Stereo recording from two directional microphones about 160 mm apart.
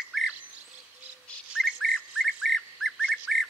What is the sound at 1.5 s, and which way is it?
Bird, centre (ahead or behind).